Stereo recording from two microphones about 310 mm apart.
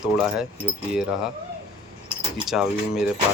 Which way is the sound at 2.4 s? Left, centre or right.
Centre.